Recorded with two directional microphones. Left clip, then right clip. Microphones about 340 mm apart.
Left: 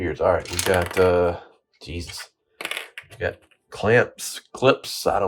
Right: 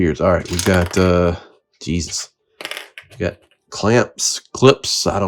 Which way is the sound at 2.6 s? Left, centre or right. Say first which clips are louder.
Right 1 dB; centre.